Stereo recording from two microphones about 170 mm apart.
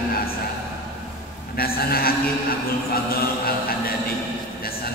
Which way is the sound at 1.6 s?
60° left (ahead or behind).